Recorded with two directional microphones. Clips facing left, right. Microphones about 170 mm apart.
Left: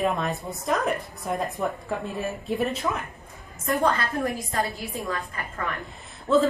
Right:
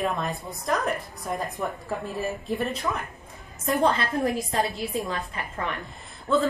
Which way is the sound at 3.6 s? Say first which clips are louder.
Right 1 dB; 25° right (ahead or behind).